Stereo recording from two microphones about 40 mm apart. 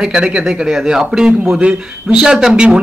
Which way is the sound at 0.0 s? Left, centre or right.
Right.